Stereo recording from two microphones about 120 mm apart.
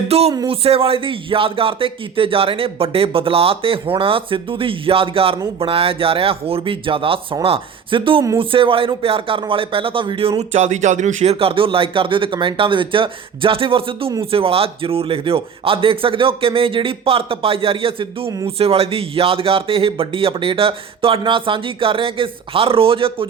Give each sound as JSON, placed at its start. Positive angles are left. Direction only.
{"t": 0.1, "sound": "speech", "side_deg": -55}
{"t": 10.5, "sound": "speech", "side_deg": -80}